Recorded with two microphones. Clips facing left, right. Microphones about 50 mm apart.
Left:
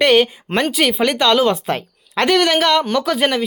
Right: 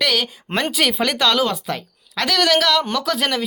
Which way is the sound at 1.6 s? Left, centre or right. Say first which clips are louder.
Left 5 dB; left.